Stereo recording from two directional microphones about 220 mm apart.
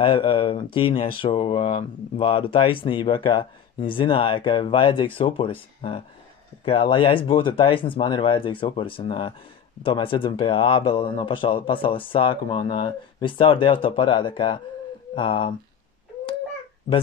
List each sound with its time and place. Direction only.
0.0 s speech: 25° left (ahead or behind)